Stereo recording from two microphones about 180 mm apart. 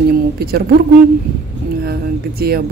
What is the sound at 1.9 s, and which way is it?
Speech, 55° right (ahead or behind).